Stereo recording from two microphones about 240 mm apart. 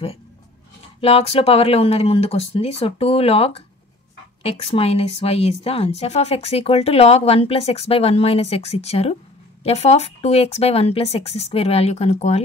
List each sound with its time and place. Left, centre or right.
1.0 s speech: left